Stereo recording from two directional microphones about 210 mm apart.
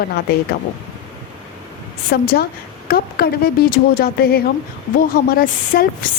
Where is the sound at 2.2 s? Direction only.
45° left (ahead or behind).